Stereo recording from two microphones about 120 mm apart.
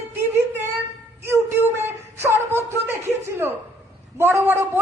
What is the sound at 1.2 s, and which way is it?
A woman's voice, 20° right (ahead or behind).